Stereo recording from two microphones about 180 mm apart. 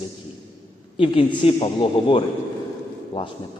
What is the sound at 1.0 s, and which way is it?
A man's voice, 30° left (ahead or behind).